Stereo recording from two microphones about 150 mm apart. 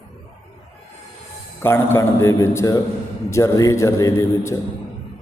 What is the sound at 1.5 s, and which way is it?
A man's voice, 15° left (ahead or behind).